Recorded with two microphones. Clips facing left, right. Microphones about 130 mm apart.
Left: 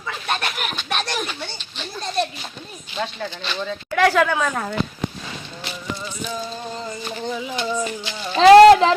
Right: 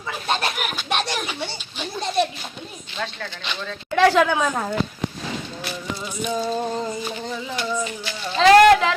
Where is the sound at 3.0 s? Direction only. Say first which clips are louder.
Left 3 dB; 15° left (ahead or behind).